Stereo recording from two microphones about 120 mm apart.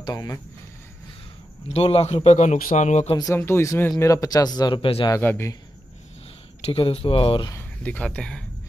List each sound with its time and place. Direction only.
0.0 s speech: 30° left (ahead or behind)
1.7 s a man's voice: 55° left (ahead or behind); by 3.1 s 80° left
3.3 s speech: 20° left (ahead or behind); by 5.1 s 45° left (ahead or behind)
5.1 s speech: 20° left (ahead or behind)
6.6 s speech: 55° left (ahead or behind)
7.8 s speech: 10° left (ahead or behind)